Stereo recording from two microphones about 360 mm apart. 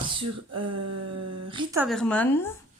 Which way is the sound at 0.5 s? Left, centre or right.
Right.